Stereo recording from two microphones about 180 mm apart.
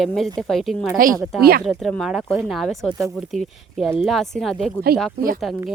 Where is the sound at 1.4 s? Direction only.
60° right (ahead or behind).